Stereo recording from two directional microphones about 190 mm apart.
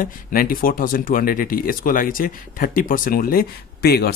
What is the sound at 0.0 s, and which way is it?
Speech, 50° left (ahead or behind).